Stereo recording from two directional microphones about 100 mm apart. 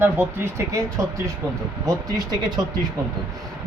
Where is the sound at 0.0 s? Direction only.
25° right (ahead or behind); by 2.6 s 45° right (ahead or behind).